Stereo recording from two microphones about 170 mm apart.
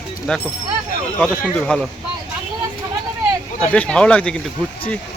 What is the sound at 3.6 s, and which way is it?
Speech, 5° left (ahead or behind).